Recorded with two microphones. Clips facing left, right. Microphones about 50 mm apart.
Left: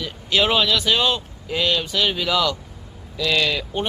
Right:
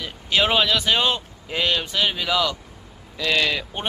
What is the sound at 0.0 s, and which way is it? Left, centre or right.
Speech, right.